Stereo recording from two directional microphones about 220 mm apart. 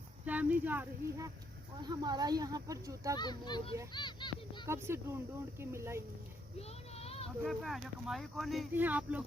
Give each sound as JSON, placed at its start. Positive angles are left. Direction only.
{"t": 0.3, "sound": "speech", "side_deg": -5}
{"t": 1.8, "sound": "speech", "side_deg": -20}
{"t": 3.2, "sound": "a child's voice", "side_deg": 20}
{"t": 4.6, "sound": "speech", "side_deg": -10}
{"t": 6.6, "sound": "a sound", "side_deg": 25}
{"t": 7.4, "sound": "speech", "side_deg": 0}